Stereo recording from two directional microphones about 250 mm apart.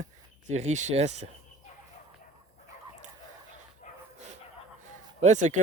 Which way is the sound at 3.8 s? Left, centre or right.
Left.